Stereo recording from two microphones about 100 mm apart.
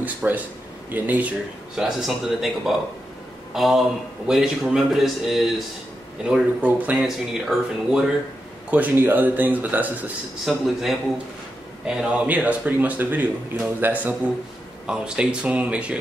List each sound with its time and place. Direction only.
0.0 s speech: 15° right (ahead or behind)
1.8 s a man's voice: centre (ahead or behind)
8.6 s speech: 15° right (ahead or behind)
10.4 s a man's voice: centre (ahead or behind); by 14.1 s 20° right (ahead or behind)
14.9 s speech: 10° right (ahead or behind)